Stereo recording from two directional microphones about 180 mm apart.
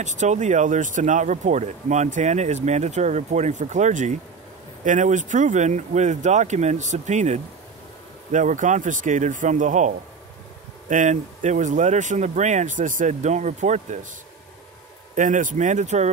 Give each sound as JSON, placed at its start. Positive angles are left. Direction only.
{"t": 0.0, "sound": "speech", "side_deg": -40}
{"t": 15.1, "sound": "speech", "side_deg": -45}